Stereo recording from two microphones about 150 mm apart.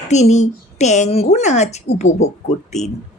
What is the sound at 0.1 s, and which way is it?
Speech, 50° left (ahead or behind).